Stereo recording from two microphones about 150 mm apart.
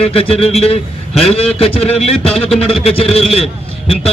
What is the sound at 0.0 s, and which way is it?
A man's voice, 40° left (ahead or behind).